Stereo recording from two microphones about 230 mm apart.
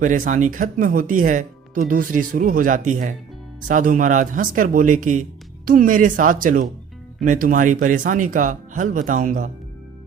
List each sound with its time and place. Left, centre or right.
0.0 s speech: right